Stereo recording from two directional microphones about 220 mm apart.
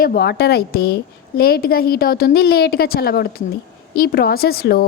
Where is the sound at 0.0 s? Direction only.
45° left (ahead or behind).